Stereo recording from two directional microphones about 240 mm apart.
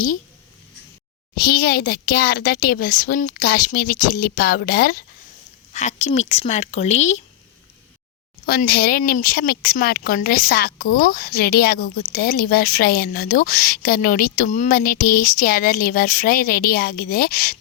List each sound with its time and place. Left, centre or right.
1.4 s speech: left
8.4 s speech: left